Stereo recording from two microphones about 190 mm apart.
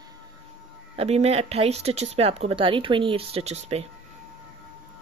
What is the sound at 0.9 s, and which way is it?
Speech, 35° right (ahead or behind).